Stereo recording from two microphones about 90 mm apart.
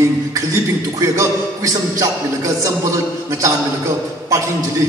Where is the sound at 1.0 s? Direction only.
35° right (ahead or behind).